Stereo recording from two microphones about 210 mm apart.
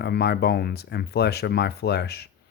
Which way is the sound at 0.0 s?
50° left (ahead or behind).